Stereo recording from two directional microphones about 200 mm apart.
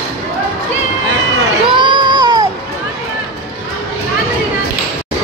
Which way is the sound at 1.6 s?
25° right (ahead or behind).